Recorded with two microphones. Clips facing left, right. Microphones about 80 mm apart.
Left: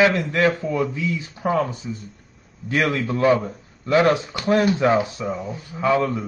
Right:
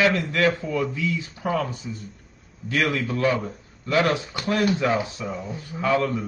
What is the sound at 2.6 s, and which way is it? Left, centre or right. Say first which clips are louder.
A man's voice: left 2 dB; left.